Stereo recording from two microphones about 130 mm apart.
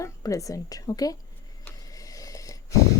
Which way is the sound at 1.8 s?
25° left (ahead or behind).